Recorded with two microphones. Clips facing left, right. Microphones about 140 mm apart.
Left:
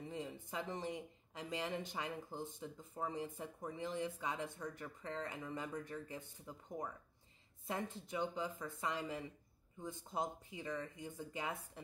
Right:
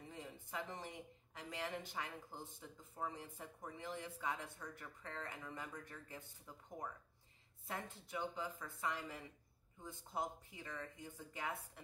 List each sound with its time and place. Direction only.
0.1 s speech: 20° left (ahead or behind)